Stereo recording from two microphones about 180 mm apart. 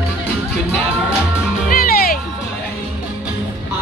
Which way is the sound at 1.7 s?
55° left (ahead or behind).